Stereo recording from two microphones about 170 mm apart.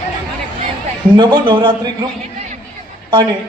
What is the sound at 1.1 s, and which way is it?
Speech, 25° right (ahead or behind).